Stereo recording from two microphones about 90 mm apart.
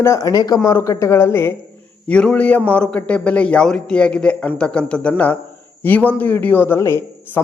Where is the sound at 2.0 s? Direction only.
15° left (ahead or behind).